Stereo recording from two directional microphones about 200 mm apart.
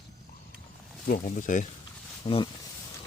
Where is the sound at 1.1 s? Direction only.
40° left (ahead or behind).